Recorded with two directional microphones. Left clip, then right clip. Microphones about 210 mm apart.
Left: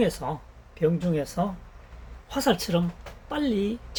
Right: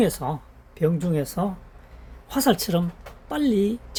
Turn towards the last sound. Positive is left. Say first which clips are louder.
# right 4 dB
turn(degrees=-50)  # may be behind; listen again after turning